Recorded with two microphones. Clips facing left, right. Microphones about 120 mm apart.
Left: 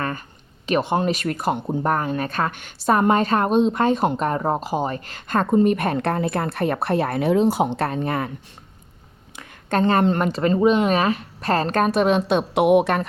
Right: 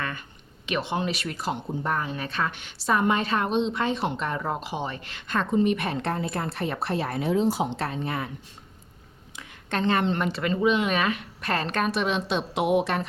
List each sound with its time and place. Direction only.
0.6 s speech: 45° left (ahead or behind)
9.3 s speech: 50° left (ahead or behind)